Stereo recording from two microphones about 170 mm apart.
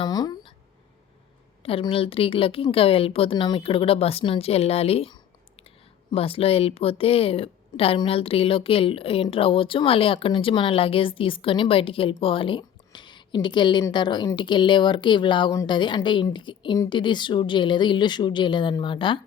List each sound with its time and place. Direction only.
0.0 s speech: 25° left (ahead or behind)
1.6 s a woman's voice: 35° left (ahead or behind)